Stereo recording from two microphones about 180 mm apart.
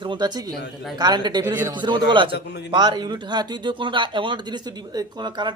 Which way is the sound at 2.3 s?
65° left (ahead or behind).